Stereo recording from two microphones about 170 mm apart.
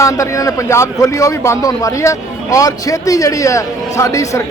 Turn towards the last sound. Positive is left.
turn(degrees=20)  # may be behind; listen again after turning